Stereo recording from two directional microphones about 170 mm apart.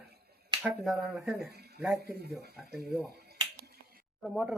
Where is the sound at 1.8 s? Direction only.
10° right (ahead or behind).